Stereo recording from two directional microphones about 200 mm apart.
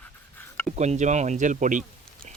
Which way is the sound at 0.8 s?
35° right (ahead or behind).